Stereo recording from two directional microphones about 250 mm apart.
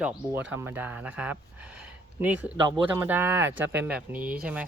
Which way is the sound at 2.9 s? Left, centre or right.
Centre.